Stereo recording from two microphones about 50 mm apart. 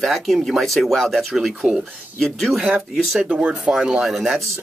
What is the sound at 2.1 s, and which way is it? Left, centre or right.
Speech, centre.